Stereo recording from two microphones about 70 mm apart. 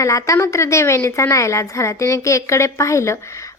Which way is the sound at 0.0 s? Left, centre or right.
Left.